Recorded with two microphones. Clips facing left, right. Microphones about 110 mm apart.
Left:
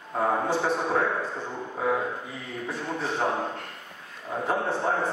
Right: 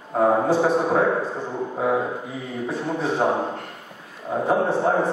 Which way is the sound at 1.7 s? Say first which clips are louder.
Right 4 dB; 20° right (ahead or behind).